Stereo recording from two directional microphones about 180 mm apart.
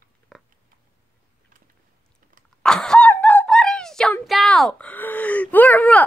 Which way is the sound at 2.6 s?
5° left (ahead or behind).